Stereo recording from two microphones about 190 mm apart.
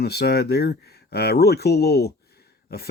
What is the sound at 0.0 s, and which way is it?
Speech, 60° left (ahead or behind).